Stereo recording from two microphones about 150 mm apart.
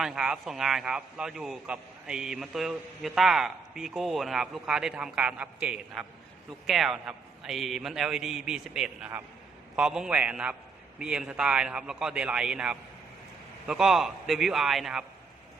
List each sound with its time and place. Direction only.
0.0 s a man's voice: 5° right (ahead or behind)